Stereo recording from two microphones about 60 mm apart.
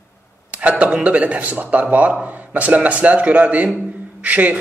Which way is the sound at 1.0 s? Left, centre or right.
Right.